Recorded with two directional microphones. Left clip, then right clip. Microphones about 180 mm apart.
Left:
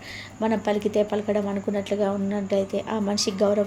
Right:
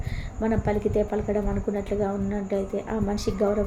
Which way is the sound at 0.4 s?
20° left (ahead or behind).